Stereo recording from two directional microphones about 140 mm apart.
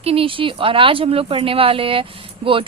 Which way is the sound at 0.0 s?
45° right (ahead or behind).